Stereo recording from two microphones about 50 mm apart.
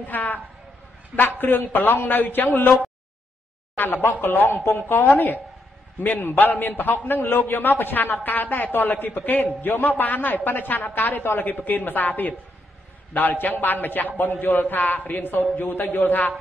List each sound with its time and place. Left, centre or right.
0.0 s a man's voice: left
1.4 s a man's voice: left
3.7 s a man's voice: left